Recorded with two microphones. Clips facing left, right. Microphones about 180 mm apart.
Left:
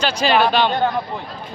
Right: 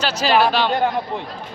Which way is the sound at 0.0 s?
5° right (ahead or behind).